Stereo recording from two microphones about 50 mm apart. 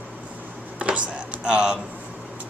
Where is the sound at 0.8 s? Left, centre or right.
Right.